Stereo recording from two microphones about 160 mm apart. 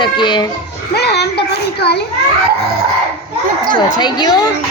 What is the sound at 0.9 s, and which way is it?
A child's voice, 90° left.